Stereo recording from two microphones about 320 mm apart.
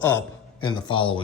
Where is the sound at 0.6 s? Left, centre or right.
Centre.